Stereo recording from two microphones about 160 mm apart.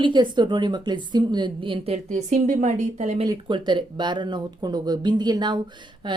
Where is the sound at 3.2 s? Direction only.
30° right (ahead or behind).